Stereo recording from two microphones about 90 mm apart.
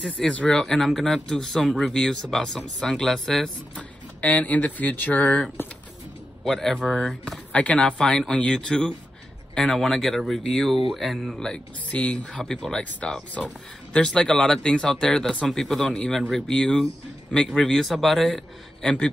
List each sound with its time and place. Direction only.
0.0 s speech: 10° left (ahead or behind)
3.7 s speech: 15° left (ahead or behind)
6.8 s speech: 10° right (ahead or behind)
7.5 s speech: 10° left (ahead or behind)